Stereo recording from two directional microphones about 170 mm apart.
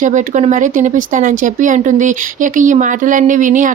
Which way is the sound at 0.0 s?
45° right (ahead or behind).